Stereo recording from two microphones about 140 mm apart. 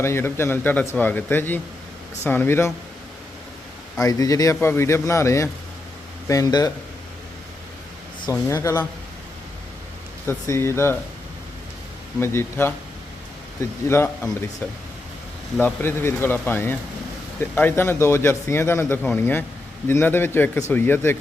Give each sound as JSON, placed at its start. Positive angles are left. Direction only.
{"t": 0.0, "sound": "a man's voice", "side_deg": 20}
{"t": 4.0, "sound": "a man's voice", "side_deg": 25}
{"t": 8.3, "sound": "a man's voice", "side_deg": 20}
{"t": 10.2, "sound": "a man's voice", "side_deg": 20}
{"t": 12.2, "sound": "a man's voice", "side_deg": 15}
{"t": 15.6, "sound": "a man's voice", "side_deg": 15}